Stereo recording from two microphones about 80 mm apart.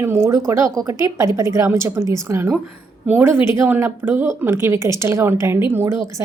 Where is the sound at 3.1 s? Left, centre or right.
Right.